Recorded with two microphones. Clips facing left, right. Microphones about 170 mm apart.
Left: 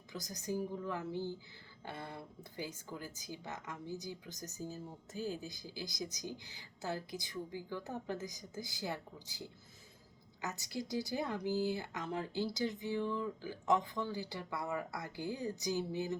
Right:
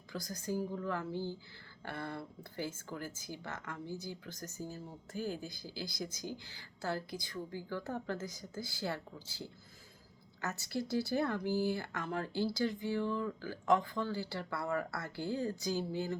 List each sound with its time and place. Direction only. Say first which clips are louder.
0.1 s a woman's voice: right 2 dB; 20° left (ahead or behind)